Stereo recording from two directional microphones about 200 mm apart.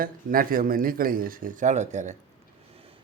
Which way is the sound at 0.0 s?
45° right (ahead or behind).